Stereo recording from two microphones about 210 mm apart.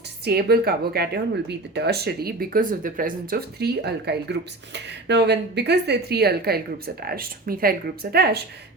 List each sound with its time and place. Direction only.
0.3 s speech: 50° right (ahead or behind)